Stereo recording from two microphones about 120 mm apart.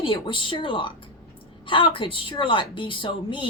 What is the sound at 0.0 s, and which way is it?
Speech, 45° left (ahead or behind).